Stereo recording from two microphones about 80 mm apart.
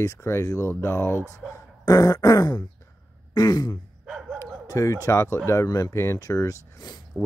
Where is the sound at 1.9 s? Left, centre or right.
Left.